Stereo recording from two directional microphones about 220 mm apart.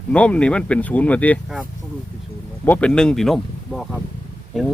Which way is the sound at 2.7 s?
5° left (ahead or behind).